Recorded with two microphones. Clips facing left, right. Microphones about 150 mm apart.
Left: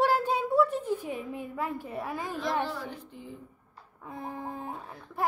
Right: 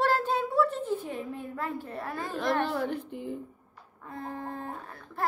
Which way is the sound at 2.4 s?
60° right (ahead or behind).